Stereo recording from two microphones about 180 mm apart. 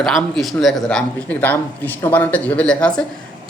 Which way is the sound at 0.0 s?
Centre (ahead or behind).